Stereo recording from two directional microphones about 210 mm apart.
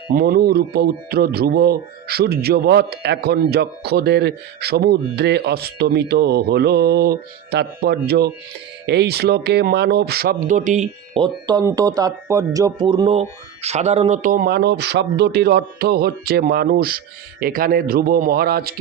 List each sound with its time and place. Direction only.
0.1 s a man's voice: 45° right (ahead or behind)
11.2 s a man's voice: 20° right (ahead or behind); by 18.7 s 45° right (ahead or behind)